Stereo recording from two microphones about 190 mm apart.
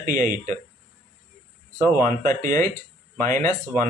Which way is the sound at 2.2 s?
45° right (ahead or behind).